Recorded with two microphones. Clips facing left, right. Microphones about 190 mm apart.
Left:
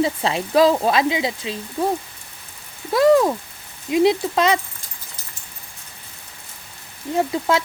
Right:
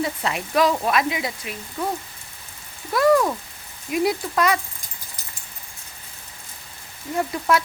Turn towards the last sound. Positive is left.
turn(degrees=25)  # may be behind; listen again after turning